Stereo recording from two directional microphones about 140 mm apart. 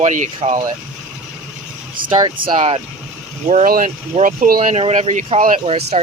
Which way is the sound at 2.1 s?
35° right (ahead or behind).